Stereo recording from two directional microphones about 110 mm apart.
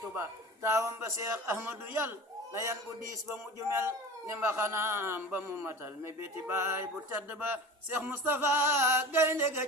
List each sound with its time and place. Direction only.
0.6 s a man's voice: 25° right (ahead or behind)